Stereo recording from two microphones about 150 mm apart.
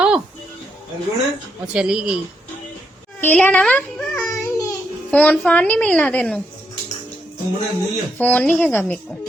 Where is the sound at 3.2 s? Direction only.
10° left (ahead or behind).